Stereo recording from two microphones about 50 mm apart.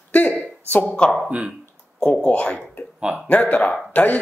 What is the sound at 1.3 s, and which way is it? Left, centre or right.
Speech, right.